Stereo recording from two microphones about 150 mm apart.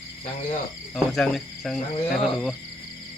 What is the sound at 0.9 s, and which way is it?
Cricket, 5° left (ahead or behind).